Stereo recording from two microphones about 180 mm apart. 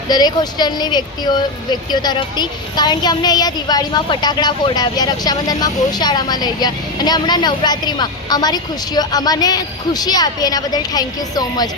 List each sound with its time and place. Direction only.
0.1 s speech: 20° left (ahead or behind)